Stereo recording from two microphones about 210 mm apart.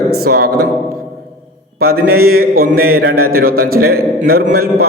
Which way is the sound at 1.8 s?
45° right (ahead or behind).